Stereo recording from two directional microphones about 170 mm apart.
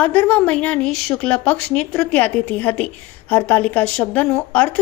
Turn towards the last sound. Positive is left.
turn(degrees=10)  # may be behind; listen again after turning